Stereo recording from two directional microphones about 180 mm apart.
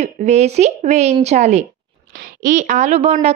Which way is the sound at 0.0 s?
40° right (ahead or behind).